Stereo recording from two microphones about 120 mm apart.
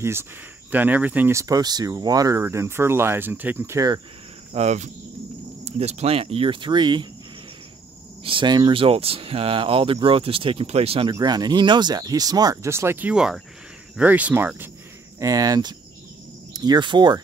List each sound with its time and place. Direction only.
0.0 s speech: 20° right (ahead or behind)
1.3 s speech: 30° right (ahead or behind)
4.6 s cricket: 75° right (ahead or behind)
5.7 s speech: 60° right (ahead or behind); by 7.1 s 40° right (ahead or behind)
8.2 s speech: 45° right (ahead or behind)
11.1 s speech: 35° right (ahead or behind); by 14.7 s 15° right (ahead or behind)
15.1 s speech: 30° right (ahead or behind)